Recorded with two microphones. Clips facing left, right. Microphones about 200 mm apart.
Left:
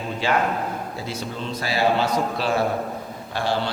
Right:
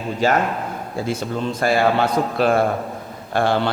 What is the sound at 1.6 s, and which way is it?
A man's voice, 55° right (ahead or behind).